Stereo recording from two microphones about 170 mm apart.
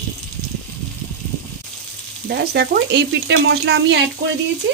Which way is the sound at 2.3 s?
70° right (ahead or behind).